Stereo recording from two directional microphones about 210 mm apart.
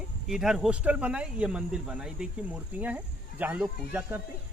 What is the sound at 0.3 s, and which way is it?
Speech, centre (ahead or behind).